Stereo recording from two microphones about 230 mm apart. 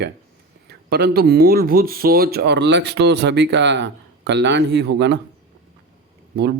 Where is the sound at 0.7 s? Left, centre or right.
Right.